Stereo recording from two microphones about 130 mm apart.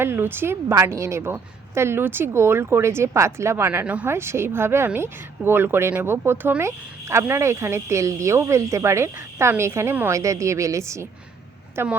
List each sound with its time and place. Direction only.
0.0 s speech: 15° right (ahead or behind)